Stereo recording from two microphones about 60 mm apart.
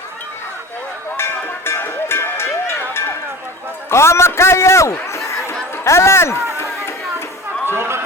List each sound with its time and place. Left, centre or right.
1.1 s music: left
3.8 s a man's voice: left
6.6 s a sound: left
7.6 s chatter: right